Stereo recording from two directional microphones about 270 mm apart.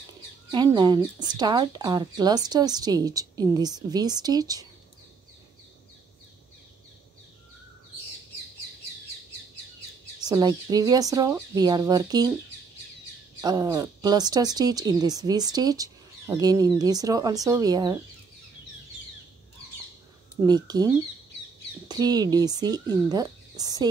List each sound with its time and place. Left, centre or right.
0.5 s speech: centre
10.2 s speech: centre
13.4 s speech: centre
20.4 s speech: centre